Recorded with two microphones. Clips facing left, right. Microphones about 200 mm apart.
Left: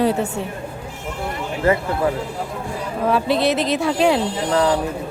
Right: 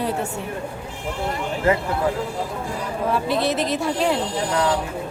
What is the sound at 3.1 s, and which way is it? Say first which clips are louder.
A woman's voice: left 3 dB; 85° left.